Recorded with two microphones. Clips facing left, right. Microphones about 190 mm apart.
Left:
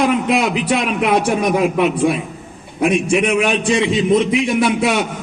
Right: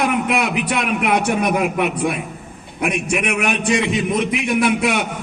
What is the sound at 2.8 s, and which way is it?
A man's voice, 60° right (ahead or behind).